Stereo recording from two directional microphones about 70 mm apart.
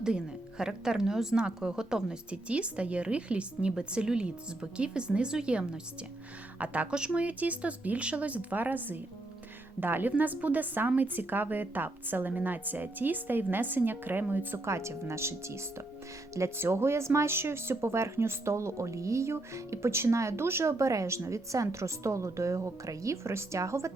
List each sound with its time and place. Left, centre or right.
0.6 s a woman's voice: centre; by 14.6 s right
14.6 s speech: right